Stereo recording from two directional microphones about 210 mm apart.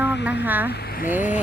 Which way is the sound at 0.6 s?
50° left (ahead or behind).